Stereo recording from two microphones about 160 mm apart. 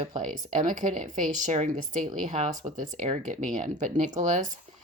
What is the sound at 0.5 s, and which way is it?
Speech, 55° right (ahead or behind).